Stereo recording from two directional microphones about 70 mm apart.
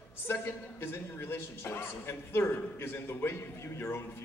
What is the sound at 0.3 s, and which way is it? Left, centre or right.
A woman's voice, left.